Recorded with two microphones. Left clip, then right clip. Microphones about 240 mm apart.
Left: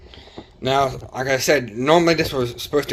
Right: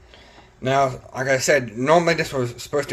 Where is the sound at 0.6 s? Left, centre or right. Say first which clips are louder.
Even; centre.